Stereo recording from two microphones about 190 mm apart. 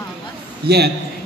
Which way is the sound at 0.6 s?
60° right (ahead or behind).